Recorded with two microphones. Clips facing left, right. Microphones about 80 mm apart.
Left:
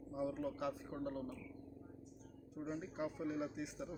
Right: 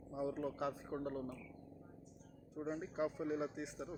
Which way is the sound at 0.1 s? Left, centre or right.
Right.